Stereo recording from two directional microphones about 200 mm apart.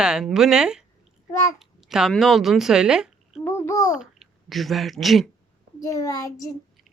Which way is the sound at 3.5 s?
15° left (ahead or behind).